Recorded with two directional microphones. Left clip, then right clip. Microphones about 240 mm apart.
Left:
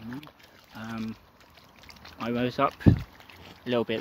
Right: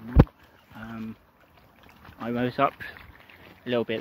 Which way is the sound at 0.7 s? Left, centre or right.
Centre.